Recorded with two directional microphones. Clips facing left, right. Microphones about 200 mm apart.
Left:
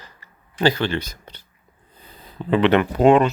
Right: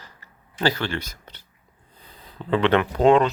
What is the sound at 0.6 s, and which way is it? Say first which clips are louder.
Speech: left 4 dB; 20° left (ahead or behind).